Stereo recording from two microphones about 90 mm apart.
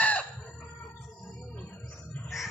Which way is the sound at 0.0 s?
15° left (ahead or behind).